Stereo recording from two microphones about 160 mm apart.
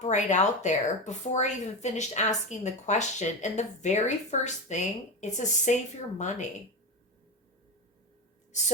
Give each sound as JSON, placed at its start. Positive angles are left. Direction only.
{"t": 0.0, "sound": "speech", "side_deg": 50}